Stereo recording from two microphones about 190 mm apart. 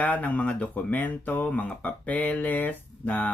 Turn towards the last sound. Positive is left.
turn(degrees=10)  # may be behind; listen again after turning